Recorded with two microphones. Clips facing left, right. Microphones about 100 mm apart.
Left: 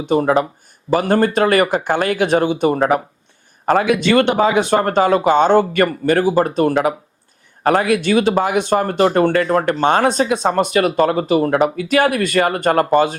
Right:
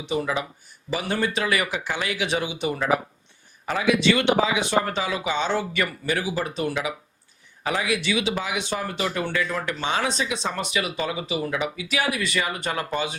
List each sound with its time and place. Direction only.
0.0 s speech: 50° left (ahead or behind)